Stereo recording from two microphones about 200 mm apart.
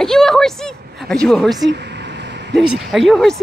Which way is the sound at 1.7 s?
60° right (ahead or behind).